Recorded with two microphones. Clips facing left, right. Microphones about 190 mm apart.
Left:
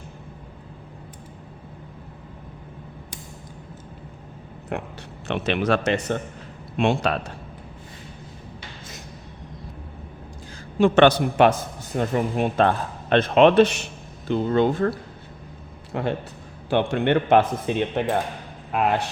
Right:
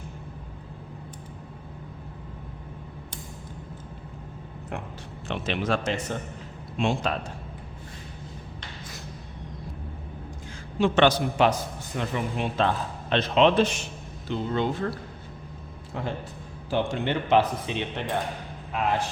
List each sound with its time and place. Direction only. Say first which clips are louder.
4.7 s speech: left 6 dB; 65° left (ahead or behind)
10.8 s speech: left 5 dB; 55° left (ahead or behind)
11.9 s speech: left 6 dB; 45° left (ahead or behind); by 13.8 s 65° left (ahead or behind)
14.3 s speech: left 7 dB; 50° left (ahead or behind)
15.9 s speech: left 6 dB; 70° left (ahead or behind); by 18.2 s 50° left (ahead or behind)
18.7 s speech: left 4 dB; 70° left (ahead or behind)